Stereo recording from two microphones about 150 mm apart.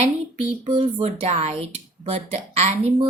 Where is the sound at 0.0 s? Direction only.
40° right (ahead or behind).